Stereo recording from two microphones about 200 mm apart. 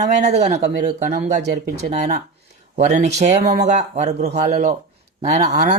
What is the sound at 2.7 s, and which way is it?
Speech, 35° right (ahead or behind).